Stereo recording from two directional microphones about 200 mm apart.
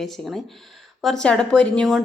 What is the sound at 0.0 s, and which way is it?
Speech, centre (ahead or behind).